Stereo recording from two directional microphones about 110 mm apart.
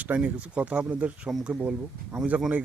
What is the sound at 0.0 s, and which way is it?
Speech, 15° right (ahead or behind).